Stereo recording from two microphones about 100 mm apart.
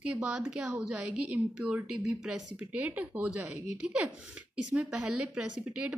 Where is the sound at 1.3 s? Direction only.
10° right (ahead or behind).